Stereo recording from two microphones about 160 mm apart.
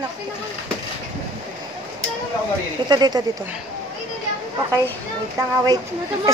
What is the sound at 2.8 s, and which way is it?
Speech, 25° right (ahead or behind).